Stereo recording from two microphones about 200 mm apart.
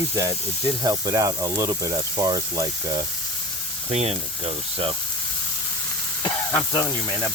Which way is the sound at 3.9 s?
30° right (ahead or behind).